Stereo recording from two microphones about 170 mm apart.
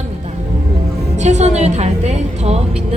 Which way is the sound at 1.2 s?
40° right (ahead or behind).